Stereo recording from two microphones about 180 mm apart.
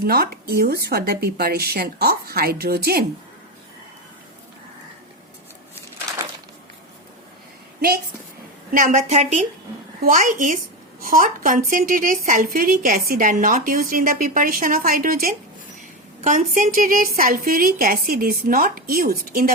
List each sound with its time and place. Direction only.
0.0 s speech: 60° right (ahead or behind)
8.7 s a woman's voice: 45° right (ahead or behind)